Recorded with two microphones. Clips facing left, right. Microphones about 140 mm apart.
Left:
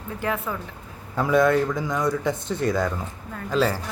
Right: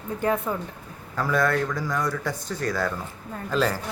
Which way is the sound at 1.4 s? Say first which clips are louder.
Left 4 dB; 20° left (ahead or behind).